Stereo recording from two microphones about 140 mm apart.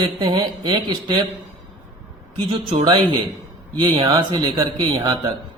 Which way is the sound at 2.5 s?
40° right (ahead or behind).